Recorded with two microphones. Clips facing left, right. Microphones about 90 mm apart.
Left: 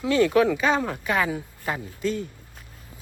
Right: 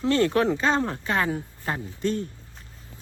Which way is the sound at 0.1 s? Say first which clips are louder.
Left 2 dB; 35° right (ahead or behind).